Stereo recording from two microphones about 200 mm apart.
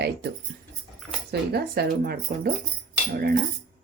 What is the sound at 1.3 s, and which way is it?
Speech, 55° right (ahead or behind).